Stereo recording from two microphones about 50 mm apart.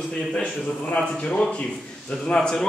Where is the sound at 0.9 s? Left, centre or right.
Left.